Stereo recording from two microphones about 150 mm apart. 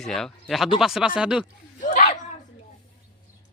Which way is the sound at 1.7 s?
60° left (ahead or behind).